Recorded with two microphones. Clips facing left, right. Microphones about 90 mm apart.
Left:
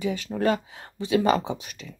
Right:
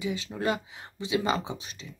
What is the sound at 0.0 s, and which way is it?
Speech, 60° left (ahead or behind).